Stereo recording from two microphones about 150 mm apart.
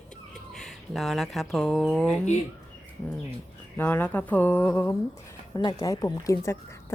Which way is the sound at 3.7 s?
10° left (ahead or behind).